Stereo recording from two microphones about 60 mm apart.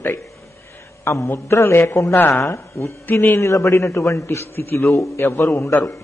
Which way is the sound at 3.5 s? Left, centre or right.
Left.